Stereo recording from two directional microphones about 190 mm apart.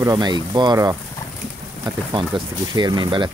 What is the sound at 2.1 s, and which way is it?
Speech, 25° right (ahead or behind).